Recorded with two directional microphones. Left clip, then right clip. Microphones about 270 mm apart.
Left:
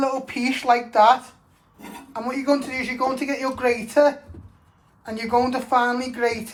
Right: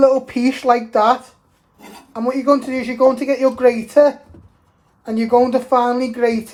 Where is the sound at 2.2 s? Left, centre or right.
Right.